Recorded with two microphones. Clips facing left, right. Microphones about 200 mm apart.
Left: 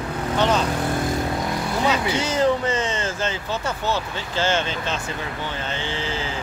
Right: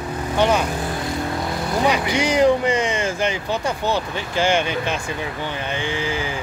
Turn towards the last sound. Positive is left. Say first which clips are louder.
# right 3 dB
turn(degrees=-15)  # may be behind; listen again after turning